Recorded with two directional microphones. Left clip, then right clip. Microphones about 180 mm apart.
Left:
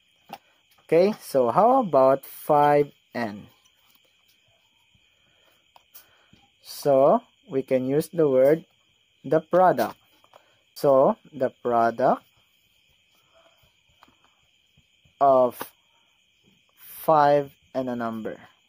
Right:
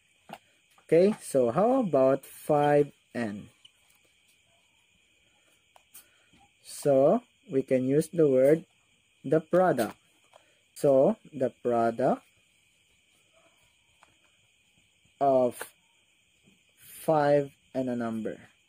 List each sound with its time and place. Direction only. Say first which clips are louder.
0.8 s speech: left 3 dB; 15° right (ahead or behind)
6.6 s speech: left 4 dB; 15° right (ahead or behind)
15.1 s speech: left 6 dB; 15° right (ahead or behind)
17.0 s speech: left 5 dB; 15° right (ahead or behind)